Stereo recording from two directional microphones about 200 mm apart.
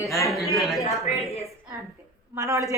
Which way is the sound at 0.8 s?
30° left (ahead or behind).